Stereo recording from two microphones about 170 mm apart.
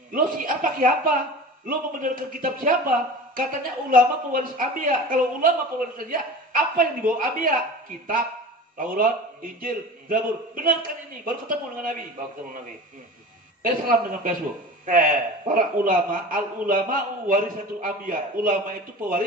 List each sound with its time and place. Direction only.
0.1 s a man's voice: 55° right (ahead or behind)
8.7 s a man's voice: 55° right (ahead or behind)
13.6 s a man's voice: 55° right (ahead or behind)